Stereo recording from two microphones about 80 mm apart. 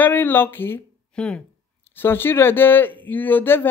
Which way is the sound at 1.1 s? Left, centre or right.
Centre.